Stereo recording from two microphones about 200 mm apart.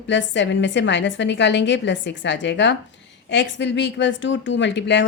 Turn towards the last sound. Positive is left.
turn(degrees=60)  # may be behind; listen again after turning